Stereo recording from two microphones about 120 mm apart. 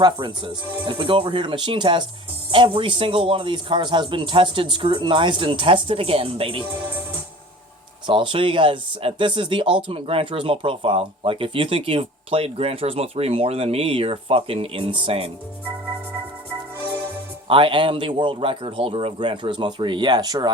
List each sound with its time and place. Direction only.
0.0 s speech: 45° right (ahead or behind)
8.0 s speech: 45° right (ahead or behind)
17.5 s speech: 45° right (ahead or behind)